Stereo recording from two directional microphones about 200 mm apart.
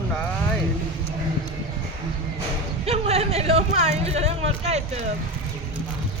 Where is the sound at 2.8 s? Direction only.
30° right (ahead or behind).